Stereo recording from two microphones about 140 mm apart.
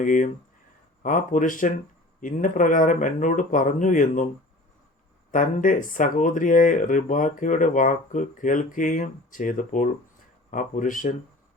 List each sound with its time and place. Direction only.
0.0 s speech: 65° left (ahead or behind)
5.3 s speech: 70° left (ahead or behind)